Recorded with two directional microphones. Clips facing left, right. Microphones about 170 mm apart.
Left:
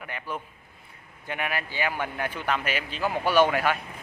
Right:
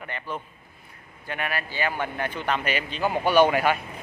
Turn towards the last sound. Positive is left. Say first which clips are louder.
# right 2 dB
turn(degrees=0)  # may be behind; listen again after turning